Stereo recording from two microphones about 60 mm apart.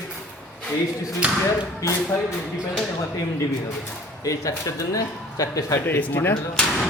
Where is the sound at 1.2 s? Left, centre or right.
Right.